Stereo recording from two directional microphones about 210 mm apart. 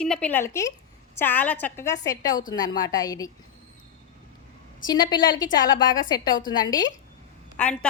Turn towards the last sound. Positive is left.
turn(degrees=5)  # may be behind; listen again after turning